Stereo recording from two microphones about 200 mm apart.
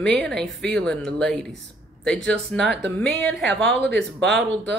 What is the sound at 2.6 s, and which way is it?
Speech, 60° right (ahead or behind).